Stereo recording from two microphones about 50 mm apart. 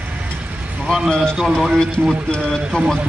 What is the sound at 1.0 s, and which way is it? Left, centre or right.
Speech, centre.